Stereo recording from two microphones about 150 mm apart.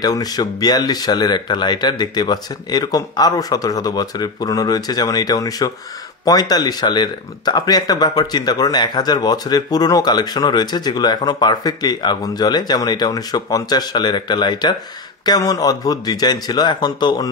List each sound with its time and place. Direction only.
0.0 s speech: 25° left (ahead or behind)